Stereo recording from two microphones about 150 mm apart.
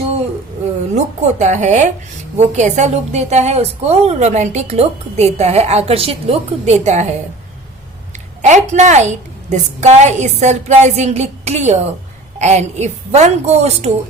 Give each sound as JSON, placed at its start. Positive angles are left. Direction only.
{"t": 0.9, "sound": "a woman's voice", "side_deg": -50}
{"t": 8.4, "sound": "a sound", "side_deg": -50}
{"t": 8.7, "sound": "a woman's voice", "side_deg": -50}